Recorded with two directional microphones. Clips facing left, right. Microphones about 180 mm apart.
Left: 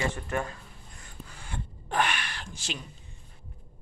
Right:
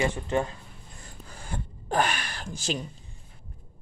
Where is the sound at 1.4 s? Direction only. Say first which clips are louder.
Right 4 dB; 40° right (ahead or behind).